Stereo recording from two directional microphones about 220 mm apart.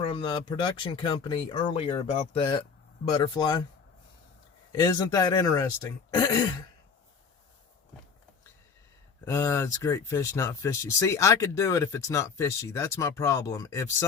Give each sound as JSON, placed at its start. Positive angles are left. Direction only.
{"t": 0.0, "sound": "speech", "side_deg": 25}
{"t": 4.7, "sound": "speech", "side_deg": 15}
{"t": 9.2, "sound": "speech", "side_deg": 15}